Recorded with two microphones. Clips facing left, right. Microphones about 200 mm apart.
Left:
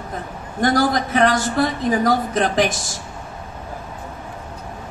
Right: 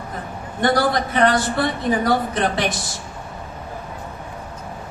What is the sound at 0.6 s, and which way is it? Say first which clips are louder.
A man's voice: left 1 dB; 45° left (ahead or behind).